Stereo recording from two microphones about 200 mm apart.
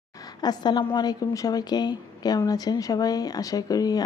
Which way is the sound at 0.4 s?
20° left (ahead or behind).